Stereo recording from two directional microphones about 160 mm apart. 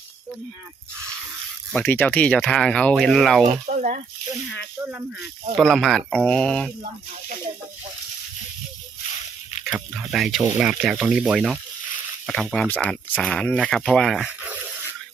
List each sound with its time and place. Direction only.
1.7 s speech: 10° left (ahead or behind)
3.7 s speech: 50° right (ahead or behind)
4.8 s speech: 10° right (ahead or behind)
5.5 s speech: centre (ahead or behind)
9.6 s speech: centre (ahead or behind)